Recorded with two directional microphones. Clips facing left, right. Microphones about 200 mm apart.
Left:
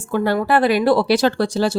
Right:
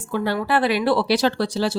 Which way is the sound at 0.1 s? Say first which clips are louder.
Left 4 dB; 45° left (ahead or behind).